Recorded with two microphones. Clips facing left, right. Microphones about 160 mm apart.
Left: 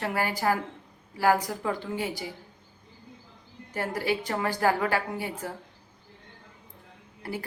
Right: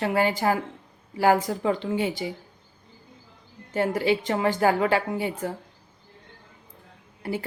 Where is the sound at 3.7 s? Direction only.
25° right (ahead or behind).